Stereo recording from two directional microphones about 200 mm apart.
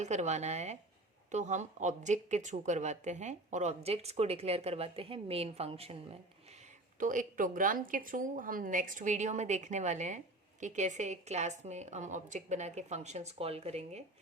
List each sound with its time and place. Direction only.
0.0 s speech: 35° right (ahead or behind)
7.0 s speech: 40° right (ahead or behind)